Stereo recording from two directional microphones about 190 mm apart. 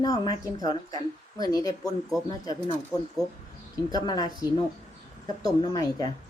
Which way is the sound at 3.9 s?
20° left (ahead or behind).